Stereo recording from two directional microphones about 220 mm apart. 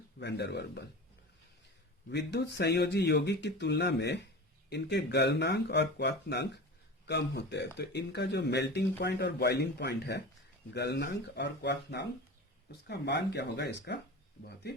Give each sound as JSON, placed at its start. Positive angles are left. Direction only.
{"t": 0.2, "sound": "speech", "side_deg": 50}
{"t": 2.0, "sound": "speech", "side_deg": 50}